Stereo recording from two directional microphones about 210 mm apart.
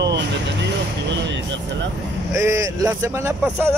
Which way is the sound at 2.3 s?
15° right (ahead or behind).